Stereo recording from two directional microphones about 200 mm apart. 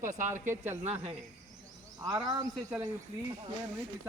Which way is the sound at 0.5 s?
10° right (ahead or behind).